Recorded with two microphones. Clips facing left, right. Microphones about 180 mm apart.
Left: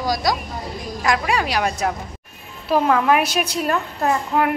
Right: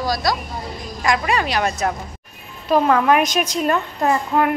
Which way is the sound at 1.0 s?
5° left (ahead or behind).